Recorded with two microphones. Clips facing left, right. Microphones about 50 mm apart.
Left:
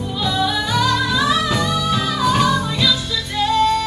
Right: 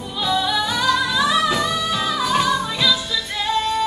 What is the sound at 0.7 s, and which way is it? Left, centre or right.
Music, centre.